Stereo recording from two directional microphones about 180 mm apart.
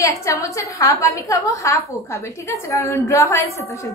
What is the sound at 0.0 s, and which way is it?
A woman's voice, 15° left (ahead or behind).